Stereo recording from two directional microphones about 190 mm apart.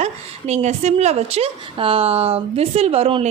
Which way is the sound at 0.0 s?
35° right (ahead or behind).